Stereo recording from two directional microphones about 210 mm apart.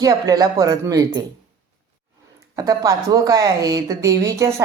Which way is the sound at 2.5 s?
15° right (ahead or behind).